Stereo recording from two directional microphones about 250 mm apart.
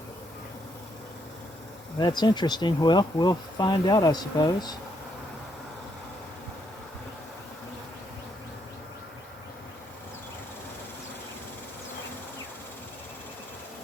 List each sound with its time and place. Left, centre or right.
2.0 s speech: centre